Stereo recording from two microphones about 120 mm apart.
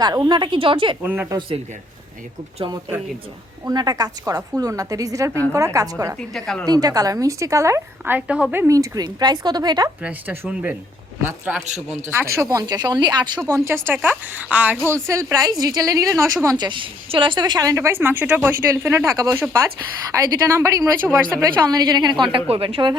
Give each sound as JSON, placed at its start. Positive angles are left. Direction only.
{"t": 0.3, "sound": "a woman's voice", "side_deg": -40}
{"t": 1.0, "sound": "speech", "side_deg": -15}
{"t": 3.7, "sound": "a woman's voice", "side_deg": -30}
{"t": 6.1, "sound": "speech", "side_deg": 5}
{"t": 6.7, "sound": "speech", "side_deg": -30}
{"t": 8.6, "sound": "a woman's voice", "side_deg": -30}
{"t": 10.0, "sound": "speech", "side_deg": -15}
{"t": 14.8, "sound": "speech", "side_deg": -25}
{"t": 16.6, "sound": "a woman's voice", "side_deg": -45}